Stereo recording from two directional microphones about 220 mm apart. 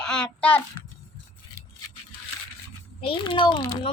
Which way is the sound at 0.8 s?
20° left (ahead or behind).